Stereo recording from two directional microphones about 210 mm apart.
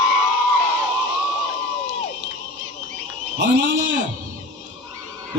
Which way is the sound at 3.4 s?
55° right (ahead or behind).